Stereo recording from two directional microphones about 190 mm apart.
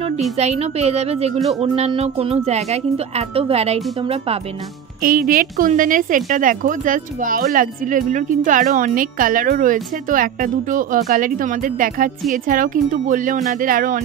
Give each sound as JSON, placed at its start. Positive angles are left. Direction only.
{"t": 0.4, "sound": "a woman's voice", "side_deg": -35}
{"t": 5.0, "sound": "a woman's voice", "side_deg": -50}